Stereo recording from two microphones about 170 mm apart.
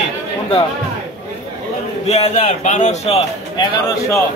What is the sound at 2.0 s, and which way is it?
Speech, 40° left (ahead or behind).